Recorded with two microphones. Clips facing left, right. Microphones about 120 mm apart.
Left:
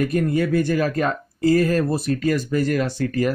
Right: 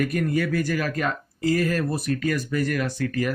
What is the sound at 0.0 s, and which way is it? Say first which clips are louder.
Speech: left 3 dB; 30° left (ahead or behind).